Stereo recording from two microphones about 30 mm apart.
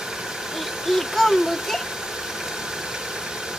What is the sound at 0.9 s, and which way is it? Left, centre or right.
Speech, centre.